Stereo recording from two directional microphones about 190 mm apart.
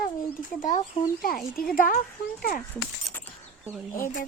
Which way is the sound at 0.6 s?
40° left (ahead or behind).